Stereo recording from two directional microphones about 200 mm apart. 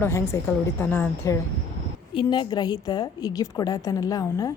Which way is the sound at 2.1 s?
25° left (ahead or behind).